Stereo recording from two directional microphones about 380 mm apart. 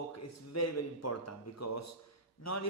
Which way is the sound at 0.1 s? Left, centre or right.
Left.